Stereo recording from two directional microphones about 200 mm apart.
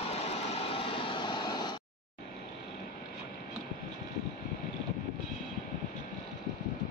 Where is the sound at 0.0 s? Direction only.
30° left (ahead or behind).